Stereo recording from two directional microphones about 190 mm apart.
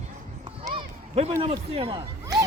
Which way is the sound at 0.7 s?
30° right (ahead or behind).